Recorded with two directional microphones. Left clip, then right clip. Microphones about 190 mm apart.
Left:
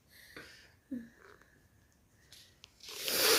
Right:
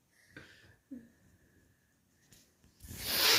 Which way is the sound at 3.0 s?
35° left (ahead or behind).